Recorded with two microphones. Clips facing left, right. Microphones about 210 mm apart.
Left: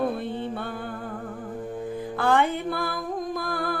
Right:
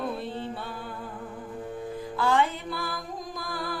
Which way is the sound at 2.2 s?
55° left (ahead or behind).